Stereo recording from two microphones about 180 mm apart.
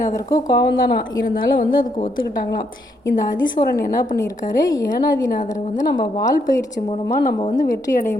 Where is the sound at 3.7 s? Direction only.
55° left (ahead or behind).